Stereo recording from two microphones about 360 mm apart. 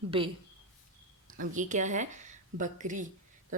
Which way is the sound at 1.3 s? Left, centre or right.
Right.